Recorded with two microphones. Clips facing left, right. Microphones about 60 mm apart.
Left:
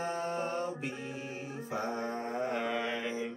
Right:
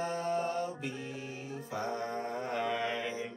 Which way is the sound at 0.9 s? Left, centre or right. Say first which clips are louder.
Left 1 dB; left.